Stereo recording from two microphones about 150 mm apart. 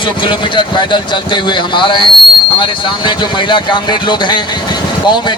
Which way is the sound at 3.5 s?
30° left (ahead or behind).